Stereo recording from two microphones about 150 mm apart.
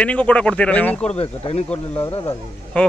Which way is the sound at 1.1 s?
40° left (ahead or behind).